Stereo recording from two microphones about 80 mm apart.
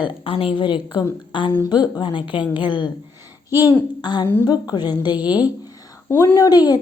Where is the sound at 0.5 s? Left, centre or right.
Left.